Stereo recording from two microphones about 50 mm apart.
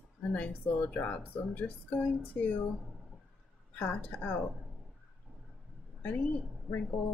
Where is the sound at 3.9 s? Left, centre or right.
Left.